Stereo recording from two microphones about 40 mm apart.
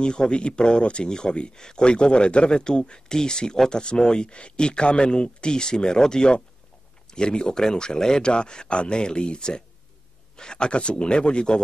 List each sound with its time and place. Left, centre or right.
0.0 s speech: left